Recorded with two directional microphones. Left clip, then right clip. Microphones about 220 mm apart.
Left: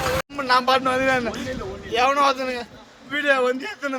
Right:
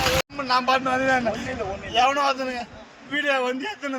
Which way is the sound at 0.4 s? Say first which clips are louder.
Left 4 dB; 10° left (ahead or behind).